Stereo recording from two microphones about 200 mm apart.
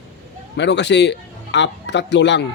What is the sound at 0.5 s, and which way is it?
Speech, 60° left (ahead or behind).